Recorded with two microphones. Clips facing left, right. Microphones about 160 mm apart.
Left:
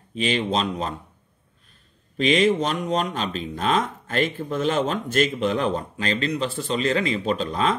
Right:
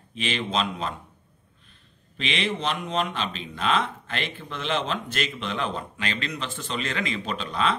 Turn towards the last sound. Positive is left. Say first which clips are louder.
# left 4 dB
turn(degrees=40)  # may be behind; listen again after turning